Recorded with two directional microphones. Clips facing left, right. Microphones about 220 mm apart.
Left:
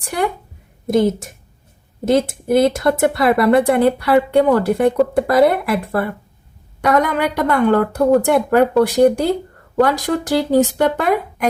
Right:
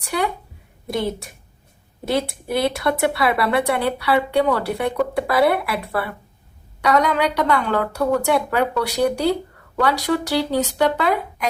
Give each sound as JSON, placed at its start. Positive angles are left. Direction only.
{"t": 0.0, "sound": "speech", "side_deg": 45}